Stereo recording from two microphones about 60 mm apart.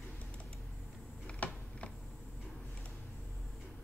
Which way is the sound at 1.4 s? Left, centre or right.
Left.